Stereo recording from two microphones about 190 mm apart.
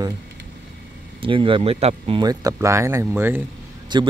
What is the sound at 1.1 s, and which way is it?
Speech, 25° right (ahead or behind).